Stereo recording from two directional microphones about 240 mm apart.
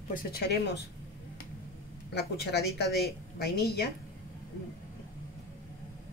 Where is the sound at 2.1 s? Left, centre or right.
Left.